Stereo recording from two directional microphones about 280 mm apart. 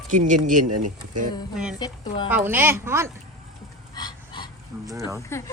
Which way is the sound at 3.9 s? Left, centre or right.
Centre.